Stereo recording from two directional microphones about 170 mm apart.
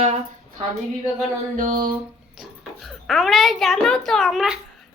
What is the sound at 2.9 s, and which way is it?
Child singing, centre (ahead or behind).